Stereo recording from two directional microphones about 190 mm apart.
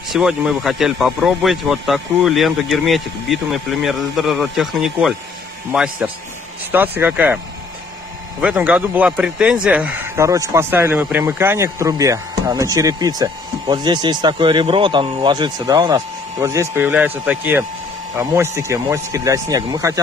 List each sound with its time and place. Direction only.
0.1 s speech: 5° right (ahead or behind)
8.4 s speech: 5° right (ahead or behind)